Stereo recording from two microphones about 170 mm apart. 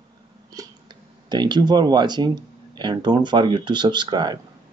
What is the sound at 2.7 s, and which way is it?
Speech, 25° right (ahead or behind).